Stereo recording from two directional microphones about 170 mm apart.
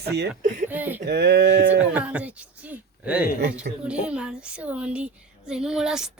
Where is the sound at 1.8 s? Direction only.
10° right (ahead or behind).